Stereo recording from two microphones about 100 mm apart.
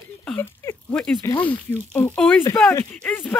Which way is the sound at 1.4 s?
20° left (ahead or behind).